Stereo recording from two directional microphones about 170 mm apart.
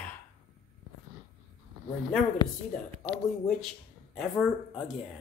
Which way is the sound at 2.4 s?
25° left (ahead or behind).